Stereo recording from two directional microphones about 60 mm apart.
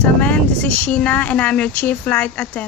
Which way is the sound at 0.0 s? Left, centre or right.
Left.